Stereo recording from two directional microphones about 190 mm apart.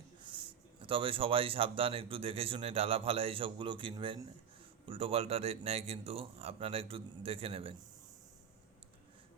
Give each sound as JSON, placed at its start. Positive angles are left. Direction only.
{"t": 0.2, "sound": "speech", "side_deg": -25}